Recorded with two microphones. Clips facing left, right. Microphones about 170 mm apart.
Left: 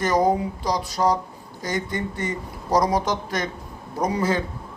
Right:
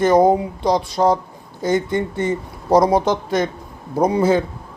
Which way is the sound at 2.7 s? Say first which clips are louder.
Right 6 dB; 25° right (ahead or behind).